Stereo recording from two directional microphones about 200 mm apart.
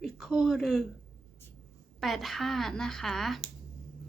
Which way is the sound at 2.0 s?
Centre (ahead or behind).